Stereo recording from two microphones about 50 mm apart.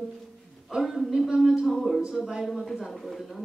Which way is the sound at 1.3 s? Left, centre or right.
Centre.